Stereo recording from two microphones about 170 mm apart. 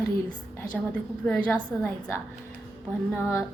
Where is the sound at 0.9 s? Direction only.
5° left (ahead or behind).